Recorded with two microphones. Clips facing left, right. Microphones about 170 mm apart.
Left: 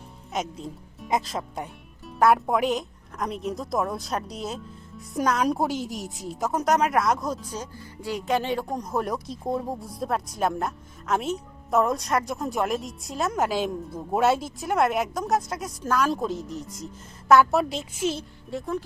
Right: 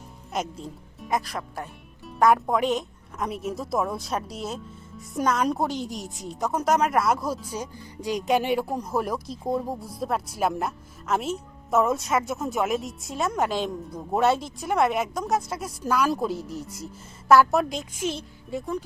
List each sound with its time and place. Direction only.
0.3 s speech: centre (ahead or behind)
1.1 s speech: 20° left (ahead or behind)
2.1 s a woman's voice: 5° left (ahead or behind)